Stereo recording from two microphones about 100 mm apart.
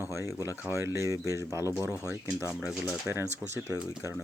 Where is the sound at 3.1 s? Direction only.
30° right (ahead or behind).